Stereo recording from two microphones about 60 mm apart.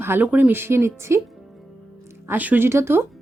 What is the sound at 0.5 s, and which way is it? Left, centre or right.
Speech, right.